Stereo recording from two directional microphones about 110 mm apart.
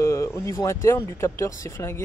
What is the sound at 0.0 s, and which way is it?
Speech, 25° left (ahead or behind).